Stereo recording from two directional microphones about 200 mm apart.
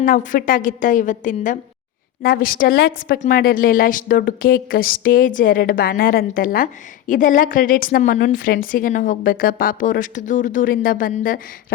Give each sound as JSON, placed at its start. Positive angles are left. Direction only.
{"t": 0.0, "sound": "a woman's voice", "side_deg": 40}